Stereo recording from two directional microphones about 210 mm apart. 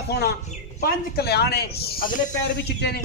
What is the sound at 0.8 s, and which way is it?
Speech, 50° left (ahead or behind).